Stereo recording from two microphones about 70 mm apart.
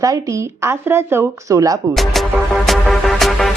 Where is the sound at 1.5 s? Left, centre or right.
Right.